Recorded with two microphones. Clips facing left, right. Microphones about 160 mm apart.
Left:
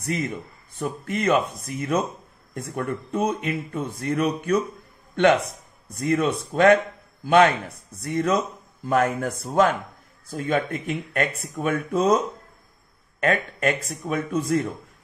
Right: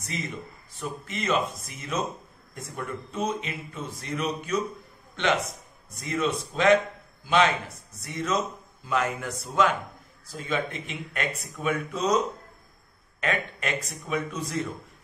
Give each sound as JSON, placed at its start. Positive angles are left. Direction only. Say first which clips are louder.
{"t": 0.7, "sound": "speech", "louder": "left 7 dB", "side_deg": 55}
{"t": 5.9, "sound": "speech", "louder": "left 5 dB", "side_deg": 55}
{"t": 13.2, "sound": "speech", "louder": "left 7 dB", "side_deg": 45}